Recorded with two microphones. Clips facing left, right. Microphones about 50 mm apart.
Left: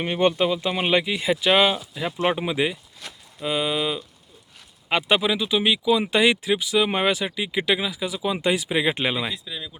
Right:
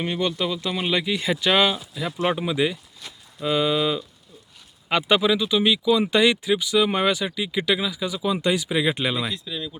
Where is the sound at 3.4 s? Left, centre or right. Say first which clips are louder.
Right 3 dB; centre.